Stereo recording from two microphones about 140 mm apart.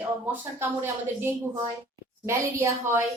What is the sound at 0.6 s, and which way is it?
A woman's voice, 15° right (ahead or behind).